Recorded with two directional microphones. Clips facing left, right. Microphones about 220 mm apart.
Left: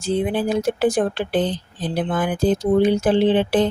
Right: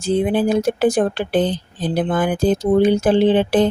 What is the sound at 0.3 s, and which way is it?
Speech, 45° right (ahead or behind).